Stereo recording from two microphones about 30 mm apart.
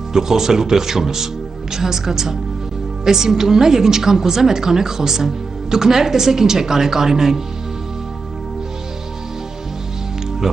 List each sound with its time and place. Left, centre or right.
0.1 s a woman's voice: centre
10.4 s music: centre